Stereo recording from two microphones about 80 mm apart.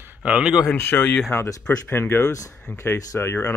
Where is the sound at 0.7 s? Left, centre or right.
Left.